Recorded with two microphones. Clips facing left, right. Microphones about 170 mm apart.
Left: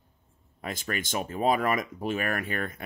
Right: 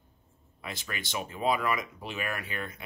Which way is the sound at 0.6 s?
45° left (ahead or behind).